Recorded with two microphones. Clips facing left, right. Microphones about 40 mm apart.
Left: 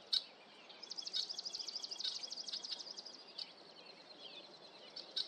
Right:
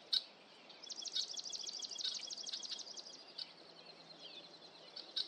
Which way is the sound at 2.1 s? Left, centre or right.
Right.